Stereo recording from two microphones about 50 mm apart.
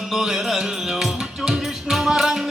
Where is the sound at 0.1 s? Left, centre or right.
Centre.